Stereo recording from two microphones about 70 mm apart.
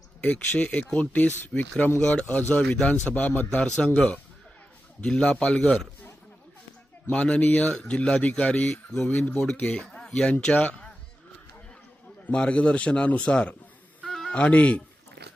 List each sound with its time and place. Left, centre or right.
0.2 s speech: left
2.6 s a man's voice: centre
5.0 s a man's voice: centre
7.1 s speech: centre
9.6 s a man's voice: centre
12.3 s a man's voice: centre
14.0 s music: centre
14.3 s speech: centre